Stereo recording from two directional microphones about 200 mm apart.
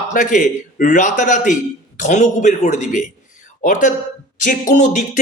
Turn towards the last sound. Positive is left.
turn(degrees=35)  # may be behind; listen again after turning